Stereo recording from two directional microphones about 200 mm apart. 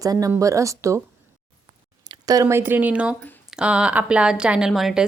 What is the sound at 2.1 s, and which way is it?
A woman's voice, 15° right (ahead or behind).